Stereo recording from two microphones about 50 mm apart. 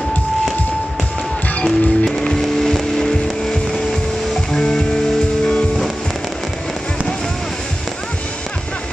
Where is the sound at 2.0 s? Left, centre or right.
Centre.